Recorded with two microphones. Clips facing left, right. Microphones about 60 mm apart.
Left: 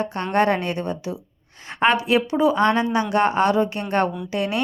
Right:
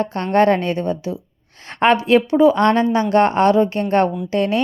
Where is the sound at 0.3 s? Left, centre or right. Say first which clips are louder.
Right 5 dB; right.